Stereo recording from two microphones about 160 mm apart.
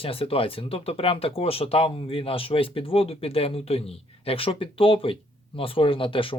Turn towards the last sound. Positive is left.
turn(degrees=35)  # may be behind; listen again after turning